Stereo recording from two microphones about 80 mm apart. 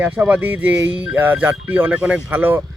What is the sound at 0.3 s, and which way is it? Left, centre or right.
Speech, right.